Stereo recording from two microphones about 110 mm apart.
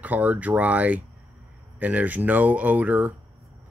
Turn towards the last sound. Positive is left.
turn(degrees=-15)  # may be behind; listen again after turning